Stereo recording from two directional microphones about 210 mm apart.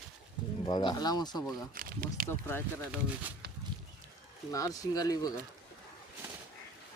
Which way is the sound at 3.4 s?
50° right (ahead or behind).